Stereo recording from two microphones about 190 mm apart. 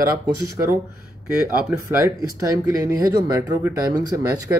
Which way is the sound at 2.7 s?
20° right (ahead or behind).